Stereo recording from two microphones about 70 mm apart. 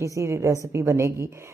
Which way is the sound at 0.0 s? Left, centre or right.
Right.